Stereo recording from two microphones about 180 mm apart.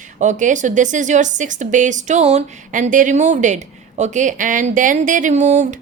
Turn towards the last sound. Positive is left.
turn(degrees=-40)  # may be behind; listen again after turning